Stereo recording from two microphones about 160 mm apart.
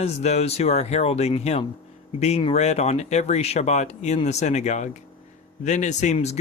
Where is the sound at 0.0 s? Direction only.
45° left (ahead or behind).